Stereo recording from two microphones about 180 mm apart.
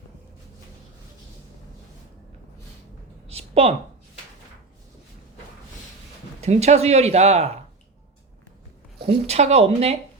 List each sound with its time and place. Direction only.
3.2 s a sound: 35° right (ahead or behind)
6.4 s speech: 40° right (ahead or behind)
9.0 s speech: 35° right (ahead or behind)